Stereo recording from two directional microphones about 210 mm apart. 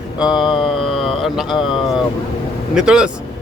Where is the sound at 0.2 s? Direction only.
5° right (ahead or behind).